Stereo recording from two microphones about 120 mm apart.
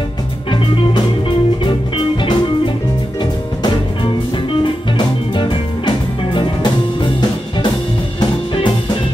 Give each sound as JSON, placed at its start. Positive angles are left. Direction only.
{"t": 1.6, "sound": "music", "side_deg": 45}
{"t": 4.9, "sound": "music", "side_deg": 40}